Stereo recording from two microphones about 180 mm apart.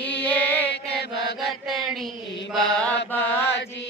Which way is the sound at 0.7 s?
65° left (ahead or behind).